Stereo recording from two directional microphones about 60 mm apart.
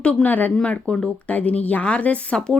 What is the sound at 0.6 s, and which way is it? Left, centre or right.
Speech, centre.